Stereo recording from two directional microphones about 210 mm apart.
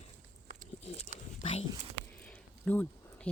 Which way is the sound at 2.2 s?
5° left (ahead or behind).